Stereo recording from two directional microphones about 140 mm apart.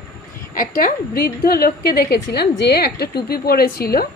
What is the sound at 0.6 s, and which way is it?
A woman's voice, 90° left.